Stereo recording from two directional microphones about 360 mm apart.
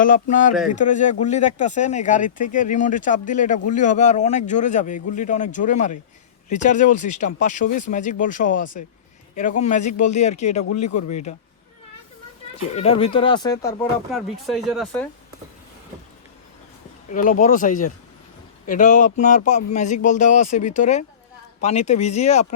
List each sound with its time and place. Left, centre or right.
0.0 s speech: left
12.7 s speech: centre
17.1 s speech: left